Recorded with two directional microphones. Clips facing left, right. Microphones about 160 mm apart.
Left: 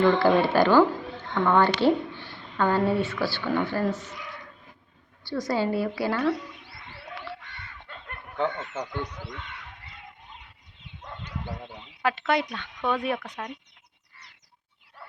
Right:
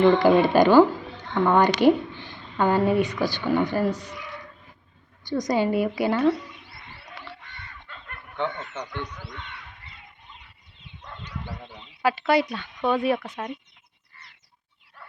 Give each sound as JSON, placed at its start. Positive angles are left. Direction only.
{"t": 0.0, "sound": "speech", "side_deg": -15}
{"t": 5.2, "sound": "a woman's voice", "side_deg": -20}
{"t": 8.4, "sound": "speech", "side_deg": 5}
{"t": 12.0, "sound": "speech", "side_deg": -5}